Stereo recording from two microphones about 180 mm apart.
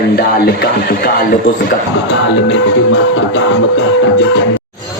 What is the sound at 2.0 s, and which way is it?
Music, 90° left.